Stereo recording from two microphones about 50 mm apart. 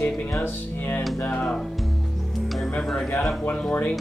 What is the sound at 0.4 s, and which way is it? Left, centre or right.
Speech, left.